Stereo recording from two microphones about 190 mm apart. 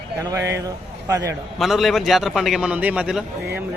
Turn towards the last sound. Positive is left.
turn(degrees=-5)  # may be behind; listen again after turning